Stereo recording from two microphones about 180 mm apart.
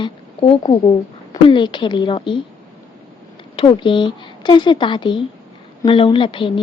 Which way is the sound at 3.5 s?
30° left (ahead or behind).